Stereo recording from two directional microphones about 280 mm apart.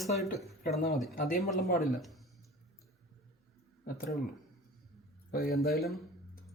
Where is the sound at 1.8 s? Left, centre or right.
Centre.